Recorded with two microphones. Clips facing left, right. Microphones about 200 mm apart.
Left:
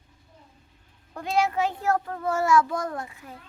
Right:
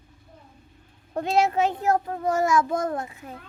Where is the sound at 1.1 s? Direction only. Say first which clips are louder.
Right 3 dB; 25° right (ahead or behind).